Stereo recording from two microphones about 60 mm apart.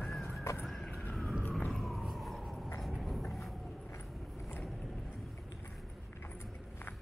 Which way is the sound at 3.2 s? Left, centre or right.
Centre.